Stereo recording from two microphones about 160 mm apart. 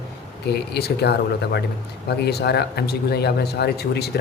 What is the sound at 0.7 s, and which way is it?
Speech, 90° left.